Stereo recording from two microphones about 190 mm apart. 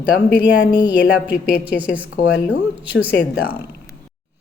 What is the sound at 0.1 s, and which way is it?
Speech, 60° left (ahead or behind).